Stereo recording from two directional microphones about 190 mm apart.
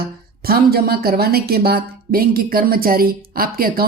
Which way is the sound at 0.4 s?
55° right (ahead or behind).